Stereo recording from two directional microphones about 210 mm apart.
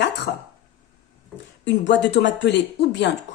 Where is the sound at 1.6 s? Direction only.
55° left (ahead or behind).